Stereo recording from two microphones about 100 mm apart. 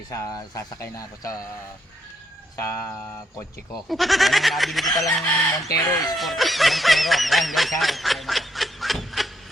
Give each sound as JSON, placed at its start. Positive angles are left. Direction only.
{"t": 0.1, "sound": "speech", "side_deg": 35}
{"t": 2.6, "sound": "music", "side_deg": 25}
{"t": 3.8, "sound": "honk", "side_deg": 0}
{"t": 5.6, "sound": "speech", "side_deg": 35}
{"t": 6.1, "sound": "honk", "side_deg": 0}
{"t": 7.8, "sound": "speech", "side_deg": 0}